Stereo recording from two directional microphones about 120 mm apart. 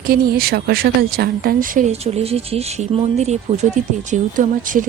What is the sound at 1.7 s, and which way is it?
Speech, 70° right (ahead or behind).